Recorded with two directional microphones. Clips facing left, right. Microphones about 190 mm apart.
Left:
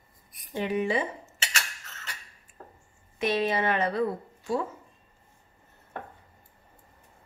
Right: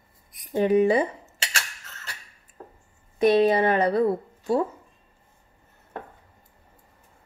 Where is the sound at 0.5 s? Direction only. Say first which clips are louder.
Right 8 dB; 40° right (ahead or behind).